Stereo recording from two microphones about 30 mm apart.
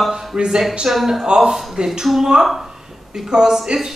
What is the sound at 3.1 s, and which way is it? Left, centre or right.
Speech, right.